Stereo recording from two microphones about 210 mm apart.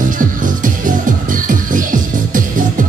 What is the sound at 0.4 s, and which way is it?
Music, 40° right (ahead or behind).